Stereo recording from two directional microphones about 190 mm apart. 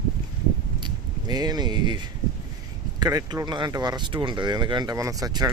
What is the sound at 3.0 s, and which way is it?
Speech, 20° right (ahead or behind).